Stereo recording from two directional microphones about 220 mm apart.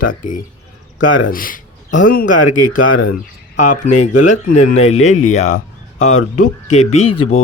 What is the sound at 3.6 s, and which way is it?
Speech, 35° left (ahead or behind).